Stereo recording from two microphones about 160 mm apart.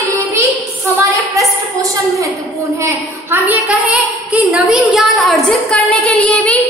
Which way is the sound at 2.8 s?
15° right (ahead or behind).